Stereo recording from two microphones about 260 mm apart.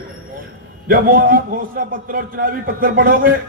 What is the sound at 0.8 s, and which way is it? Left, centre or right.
A man's voice, right.